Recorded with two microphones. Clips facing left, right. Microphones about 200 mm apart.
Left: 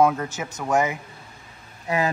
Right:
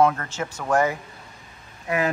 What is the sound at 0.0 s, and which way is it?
Speech, 5° left (ahead or behind).